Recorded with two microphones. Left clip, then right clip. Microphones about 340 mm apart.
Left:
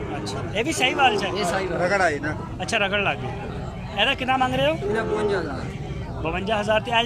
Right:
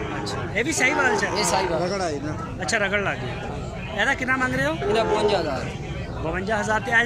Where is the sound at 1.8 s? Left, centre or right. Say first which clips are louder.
Left 5 dB; left.